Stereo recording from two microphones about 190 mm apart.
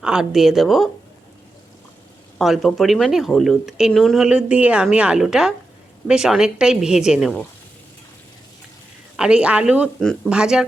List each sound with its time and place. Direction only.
0.0 s speech: 5° right (ahead or behind)
2.4 s speech: centre (ahead or behind)
9.1 s speech: 5° right (ahead or behind)